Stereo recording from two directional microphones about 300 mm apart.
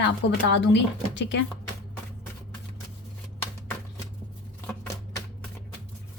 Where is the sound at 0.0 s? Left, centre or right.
Left.